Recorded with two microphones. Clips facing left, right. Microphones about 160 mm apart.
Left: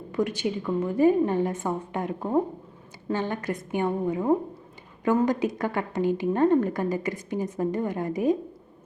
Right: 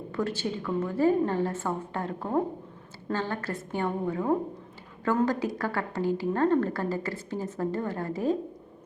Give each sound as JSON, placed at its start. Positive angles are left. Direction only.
{"t": 0.1, "sound": "a woman's voice", "side_deg": 15}